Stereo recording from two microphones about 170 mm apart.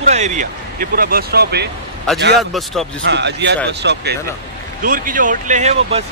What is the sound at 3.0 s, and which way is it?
Speech, 90° right.